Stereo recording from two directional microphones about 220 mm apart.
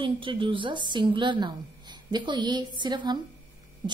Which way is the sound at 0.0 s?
25° right (ahead or behind).